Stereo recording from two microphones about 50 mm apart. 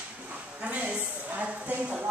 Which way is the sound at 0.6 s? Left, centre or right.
Right.